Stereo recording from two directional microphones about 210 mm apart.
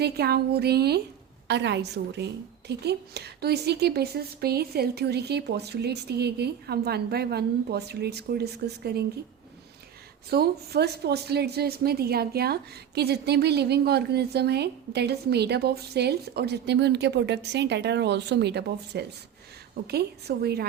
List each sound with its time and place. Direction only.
0.0 s a woman's voice: 50° right (ahead or behind)
10.2 s a woman's voice: 50° right (ahead or behind)